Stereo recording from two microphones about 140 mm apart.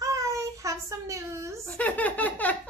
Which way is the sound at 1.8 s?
10° left (ahead or behind).